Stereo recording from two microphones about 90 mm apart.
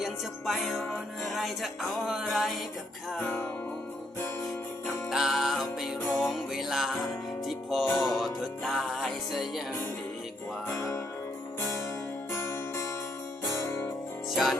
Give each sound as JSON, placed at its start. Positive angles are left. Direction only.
{"t": 0.0, "sound": "music", "side_deg": 0}
{"t": 5.1, "sound": "music", "side_deg": 0}
{"t": 10.8, "sound": "music", "side_deg": 30}
{"t": 12.3, "sound": "music", "side_deg": 30}
{"t": 14.3, "sound": "music", "side_deg": 0}